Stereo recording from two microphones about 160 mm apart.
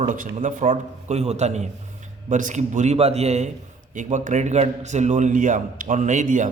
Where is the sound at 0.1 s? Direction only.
55° right (ahead or behind).